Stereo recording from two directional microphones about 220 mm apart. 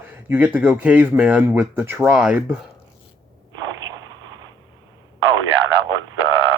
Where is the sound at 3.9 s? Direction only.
20° right (ahead or behind).